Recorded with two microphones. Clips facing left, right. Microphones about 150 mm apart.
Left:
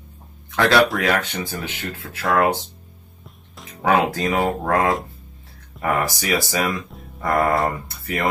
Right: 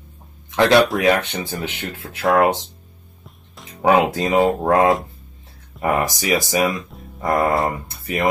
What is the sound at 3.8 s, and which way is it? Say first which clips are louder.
Speech: right 3 dB; 20° right (ahead or behind).